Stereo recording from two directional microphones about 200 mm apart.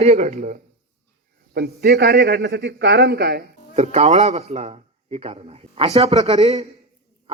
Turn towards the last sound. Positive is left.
turn(degrees=-30)  # may be behind; listen again after turning